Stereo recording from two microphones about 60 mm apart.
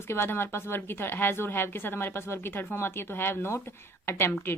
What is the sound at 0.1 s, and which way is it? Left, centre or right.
A woman's voice, left.